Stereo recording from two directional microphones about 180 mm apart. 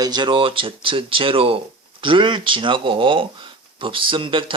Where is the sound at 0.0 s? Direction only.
25° right (ahead or behind).